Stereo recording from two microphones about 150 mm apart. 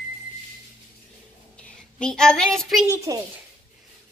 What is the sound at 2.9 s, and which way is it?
Speech, 20° right (ahead or behind).